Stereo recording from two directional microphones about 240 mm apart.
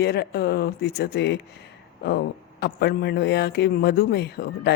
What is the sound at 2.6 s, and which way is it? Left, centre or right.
Speech, left.